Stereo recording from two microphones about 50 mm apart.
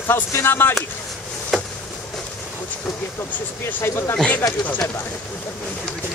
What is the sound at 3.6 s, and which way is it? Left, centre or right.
Speech, left.